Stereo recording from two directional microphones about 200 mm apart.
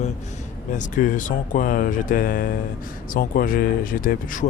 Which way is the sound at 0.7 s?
40° left (ahead or behind).